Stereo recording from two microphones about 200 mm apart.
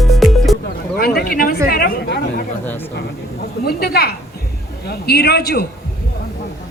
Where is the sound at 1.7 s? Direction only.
50° left (ahead or behind).